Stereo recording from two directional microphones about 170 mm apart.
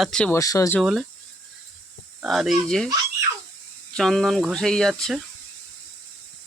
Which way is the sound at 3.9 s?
Centre (ahead or behind).